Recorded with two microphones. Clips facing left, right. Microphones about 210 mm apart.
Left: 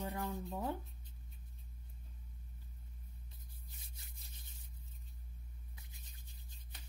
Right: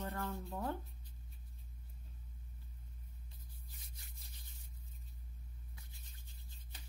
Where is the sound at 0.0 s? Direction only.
15° left (ahead or behind).